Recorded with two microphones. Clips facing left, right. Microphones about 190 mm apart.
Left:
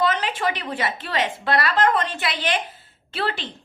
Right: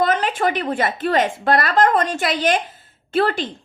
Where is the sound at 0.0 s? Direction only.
50° right (ahead or behind).